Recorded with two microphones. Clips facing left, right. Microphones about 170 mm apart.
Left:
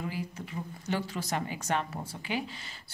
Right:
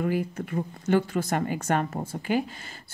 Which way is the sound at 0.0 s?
55° right (ahead or behind).